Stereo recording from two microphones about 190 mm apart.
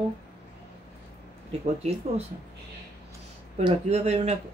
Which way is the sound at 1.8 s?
35° right (ahead or behind).